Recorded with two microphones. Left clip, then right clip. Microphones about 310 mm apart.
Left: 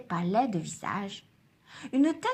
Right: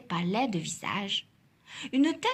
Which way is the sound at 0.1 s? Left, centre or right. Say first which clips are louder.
Left 2 dB; centre.